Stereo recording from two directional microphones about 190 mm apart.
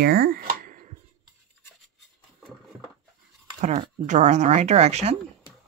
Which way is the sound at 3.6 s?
35° right (ahead or behind).